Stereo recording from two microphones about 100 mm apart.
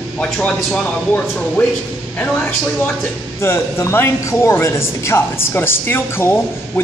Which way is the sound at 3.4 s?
25° left (ahead or behind).